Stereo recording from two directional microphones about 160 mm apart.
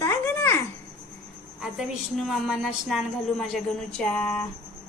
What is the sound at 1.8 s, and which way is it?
A woman's voice, centre (ahead or behind).